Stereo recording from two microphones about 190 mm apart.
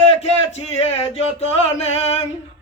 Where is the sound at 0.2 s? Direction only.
35° left (ahead or behind).